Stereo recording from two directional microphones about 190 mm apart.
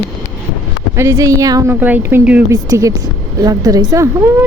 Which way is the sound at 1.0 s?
15° right (ahead or behind).